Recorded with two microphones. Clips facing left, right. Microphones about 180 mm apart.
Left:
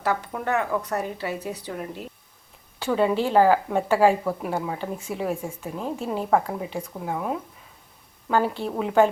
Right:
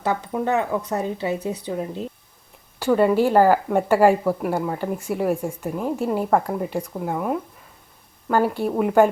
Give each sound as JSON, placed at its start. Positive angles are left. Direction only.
{"t": 0.0, "sound": "speech", "side_deg": -20}
{"t": 2.7, "sound": "a woman's voice", "side_deg": -10}
{"t": 6.3, "sound": "a woman's voice", "side_deg": 0}